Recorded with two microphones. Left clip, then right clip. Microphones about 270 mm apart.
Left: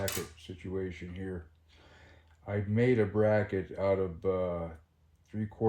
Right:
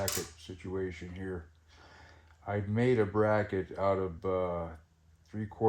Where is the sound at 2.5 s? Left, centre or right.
Centre.